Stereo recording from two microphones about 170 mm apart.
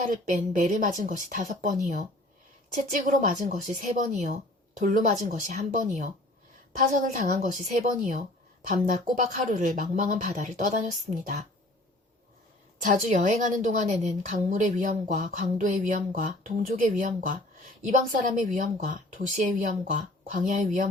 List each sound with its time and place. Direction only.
0.0 s a woman's voice: 50° right (ahead or behind)
12.8 s a woman's voice: 50° right (ahead or behind)